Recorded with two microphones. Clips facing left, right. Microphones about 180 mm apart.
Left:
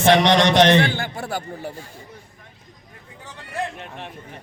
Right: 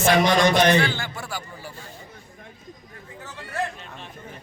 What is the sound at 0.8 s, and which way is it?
Speech, 55° left (ahead or behind).